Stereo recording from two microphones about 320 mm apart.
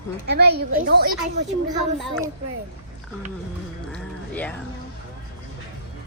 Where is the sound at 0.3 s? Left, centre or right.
Right.